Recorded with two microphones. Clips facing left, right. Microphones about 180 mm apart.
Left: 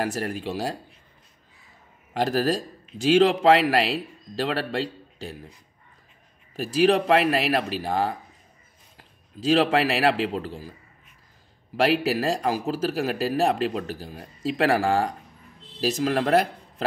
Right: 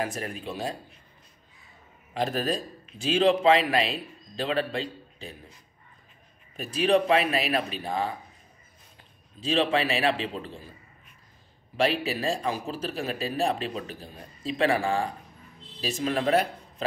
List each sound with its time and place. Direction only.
0.0 s a man's voice: 70° left (ahead or behind)
2.1 s a man's voice: 80° left
6.5 s a man's voice: 80° left
11.7 s a man's voice: 85° left
14.6 s a man's voice: 75° left (ahead or behind)